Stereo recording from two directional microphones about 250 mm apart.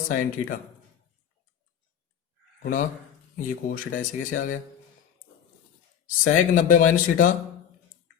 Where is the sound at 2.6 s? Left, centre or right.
Left.